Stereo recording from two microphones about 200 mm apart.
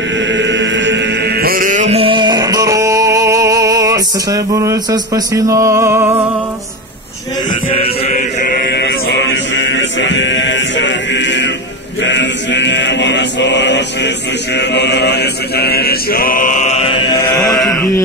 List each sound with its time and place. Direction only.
0.2 s chant: 65° right (ahead or behind); by 6.2 s 15° right (ahead or behind)
7.7 s mantra: 30° left (ahead or behind)
17.1 s chant: 15° left (ahead or behind)
17.6 s mantra: 15° left (ahead or behind)